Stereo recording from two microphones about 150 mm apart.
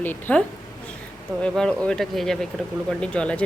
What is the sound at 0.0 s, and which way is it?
Speech, 10° left (ahead or behind).